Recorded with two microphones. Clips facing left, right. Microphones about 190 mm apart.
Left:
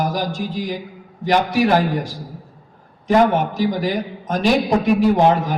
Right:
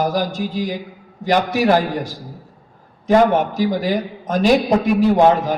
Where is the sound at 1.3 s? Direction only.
40° right (ahead or behind).